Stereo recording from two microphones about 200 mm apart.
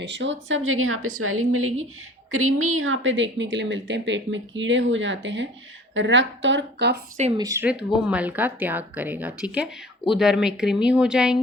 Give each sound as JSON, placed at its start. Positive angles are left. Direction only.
{"t": 0.0, "sound": "a woman's voice", "side_deg": -65}
{"t": 7.3, "sound": "speech", "side_deg": -15}